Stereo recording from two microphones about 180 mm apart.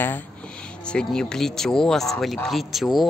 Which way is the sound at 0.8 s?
5° left (ahead or behind).